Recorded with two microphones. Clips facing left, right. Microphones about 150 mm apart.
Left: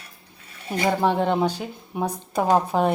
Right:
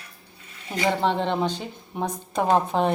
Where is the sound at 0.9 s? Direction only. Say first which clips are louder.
Left 2 dB; 10° left (ahead or behind).